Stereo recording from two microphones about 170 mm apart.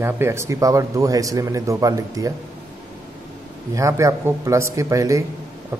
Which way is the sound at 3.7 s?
20° right (ahead or behind).